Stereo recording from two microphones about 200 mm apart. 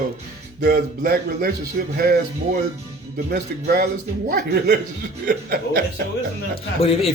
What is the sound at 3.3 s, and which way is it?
Speech, 50° right (ahead or behind).